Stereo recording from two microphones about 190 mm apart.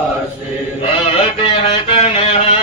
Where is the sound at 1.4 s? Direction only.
30° left (ahead or behind).